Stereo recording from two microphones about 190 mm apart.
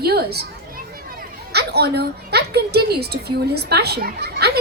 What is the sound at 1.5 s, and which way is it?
A woman's voice, 60° right (ahead or behind).